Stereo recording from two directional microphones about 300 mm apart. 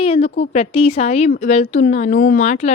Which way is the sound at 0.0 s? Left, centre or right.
Centre.